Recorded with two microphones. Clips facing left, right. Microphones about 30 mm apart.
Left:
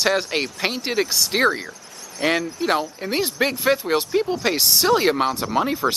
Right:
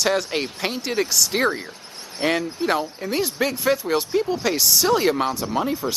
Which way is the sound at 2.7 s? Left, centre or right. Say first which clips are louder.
Left 2 dB; centre.